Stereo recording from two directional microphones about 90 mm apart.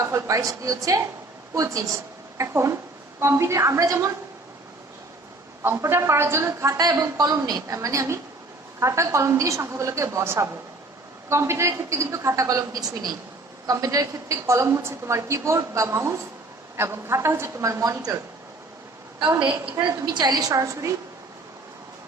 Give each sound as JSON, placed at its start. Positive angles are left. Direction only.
{"t": 0.0, "sound": "a woman's voice", "side_deg": -35}
{"t": 5.6, "sound": "a woman's voice", "side_deg": -30}
{"t": 19.8, "sound": "a woman's voice", "side_deg": -35}
{"t": 20.1, "sound": "a woman's voice", "side_deg": -50}
{"t": 20.5, "sound": "a woman's voice", "side_deg": -35}